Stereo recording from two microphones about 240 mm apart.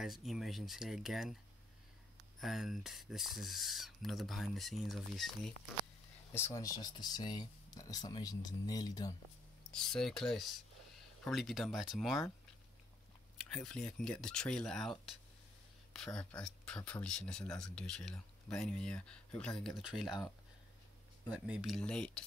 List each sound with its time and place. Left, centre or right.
0.0 s speech: centre
2.4 s speech: centre
6.3 s speech: centre
9.6 s speech: centre
13.5 s speech: centre
21.3 s speech: centre